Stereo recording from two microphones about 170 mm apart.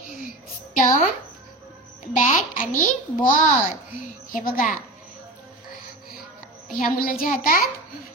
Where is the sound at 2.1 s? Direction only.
50° left (ahead or behind).